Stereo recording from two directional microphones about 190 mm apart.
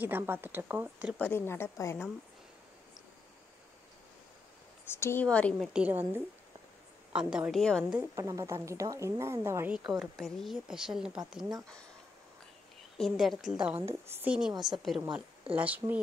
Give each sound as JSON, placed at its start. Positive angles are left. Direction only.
{"t": 0.0, "sound": "a woman's voice", "side_deg": -10}
{"t": 1.1, "sound": "a woman's voice", "side_deg": 10}
{"t": 4.8, "sound": "a woman's voice", "side_deg": 10}
{"t": 5.7, "sound": "a woman's voice", "side_deg": -5}
{"t": 8.2, "sound": "a woman's voice", "side_deg": -15}
{"t": 12.9, "sound": "a woman's voice", "side_deg": 0}
{"t": 14.5, "sound": "a woman's voice", "side_deg": -20}
{"t": 15.5, "sound": "a woman's voice", "side_deg": -10}